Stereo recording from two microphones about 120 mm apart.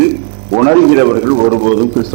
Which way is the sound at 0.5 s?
20° right (ahead or behind).